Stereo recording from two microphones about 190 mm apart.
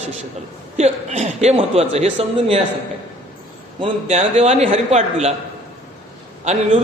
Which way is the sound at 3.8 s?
35° right (ahead or behind).